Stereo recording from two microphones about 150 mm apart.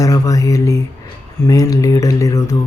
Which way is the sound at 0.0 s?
25° left (ahead or behind).